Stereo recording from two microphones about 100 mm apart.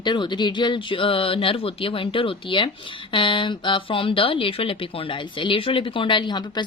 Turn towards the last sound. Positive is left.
turn(degrees=50)  # may be behind; listen again after turning